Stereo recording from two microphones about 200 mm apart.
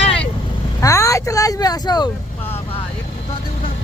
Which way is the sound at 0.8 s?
15° left (ahead or behind).